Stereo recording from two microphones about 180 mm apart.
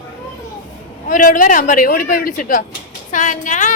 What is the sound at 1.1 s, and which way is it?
Speech, 50° left (ahead or behind).